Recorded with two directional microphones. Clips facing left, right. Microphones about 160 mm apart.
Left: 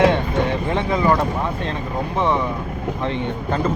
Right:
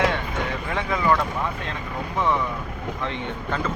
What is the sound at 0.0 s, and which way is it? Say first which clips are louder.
Vehicle: left 7 dB; 30° left (ahead or behind).